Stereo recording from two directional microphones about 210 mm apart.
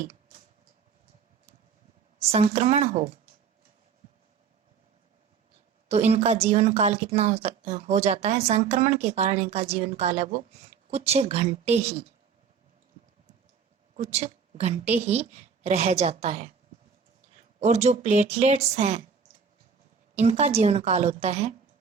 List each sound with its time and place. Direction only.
2.3 s speech: 30° right (ahead or behind)
5.9 s speech: 30° right (ahead or behind)
13.9 s speech: 30° right (ahead or behind)
17.6 s speech: 30° right (ahead or behind)
20.1 s speech: 30° right (ahead or behind)